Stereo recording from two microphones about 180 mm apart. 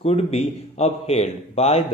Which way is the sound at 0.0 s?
35° left (ahead or behind).